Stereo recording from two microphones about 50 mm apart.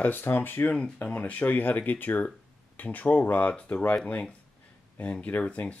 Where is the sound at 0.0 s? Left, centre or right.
Left.